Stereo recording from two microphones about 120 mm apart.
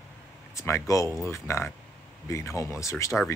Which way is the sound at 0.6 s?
25° left (ahead or behind).